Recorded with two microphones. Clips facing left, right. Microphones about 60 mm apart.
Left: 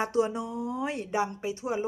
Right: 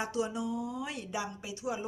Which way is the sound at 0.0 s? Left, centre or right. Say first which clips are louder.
Left 6 dB; left.